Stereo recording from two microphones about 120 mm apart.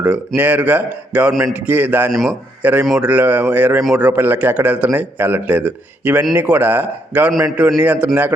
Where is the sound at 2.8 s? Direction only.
Centre (ahead or behind).